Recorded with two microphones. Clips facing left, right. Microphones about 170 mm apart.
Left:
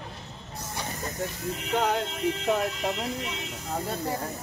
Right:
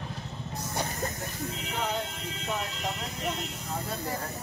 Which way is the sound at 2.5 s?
60° left (ahead or behind).